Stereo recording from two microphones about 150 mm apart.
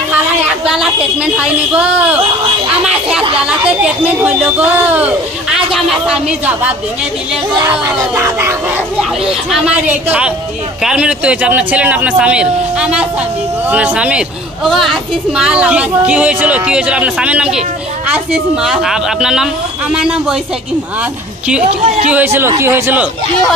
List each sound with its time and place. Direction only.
0.7 s a woman's voice: 5° right (ahead or behind)
2.8 s a sound: 5° right (ahead or behind)
3.3 s a woman's voice: 5° right (ahead or behind)
7.7 s a woman's voice: 15° right (ahead or behind)
9.2 s a woman's voice: 5° right (ahead or behind)
21.6 s a woman's voice: 45° right (ahead or behind)
22.1 s a woman's voice: 15° right (ahead or behind)